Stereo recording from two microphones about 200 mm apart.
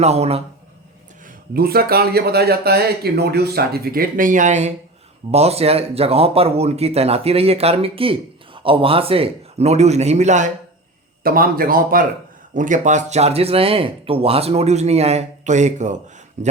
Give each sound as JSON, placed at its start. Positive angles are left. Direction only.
{"t": 0.0, "sound": "speech", "side_deg": -30}
{"t": 1.5, "sound": "speech", "side_deg": -50}
{"t": 11.2, "sound": "speech", "side_deg": -45}